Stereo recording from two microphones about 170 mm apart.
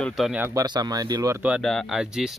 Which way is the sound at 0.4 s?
20° right (ahead or behind).